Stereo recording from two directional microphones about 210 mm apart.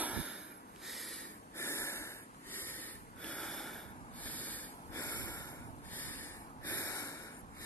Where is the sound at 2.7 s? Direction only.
5° left (ahead or behind).